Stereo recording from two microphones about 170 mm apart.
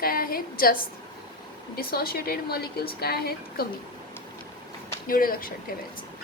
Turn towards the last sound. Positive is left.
turn(degrees=55)  # may be behind; listen again after turning